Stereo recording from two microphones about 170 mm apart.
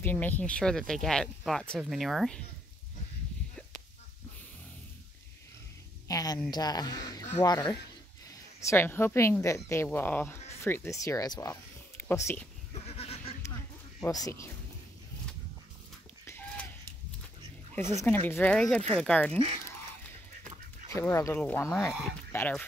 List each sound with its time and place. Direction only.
0.0 s speech: 10° left (ahead or behind)
6.0 s a woman's voice: 20° left (ahead or behind)
12.8 s goat: 35° left (ahead or behind)
14.0 s speech: 20° left (ahead or behind)
18.0 s speech: 10° left (ahead or behind)
21.1 s speech: 15° left (ahead or behind)